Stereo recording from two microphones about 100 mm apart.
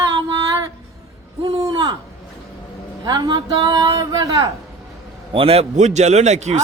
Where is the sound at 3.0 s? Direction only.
40° right (ahead or behind).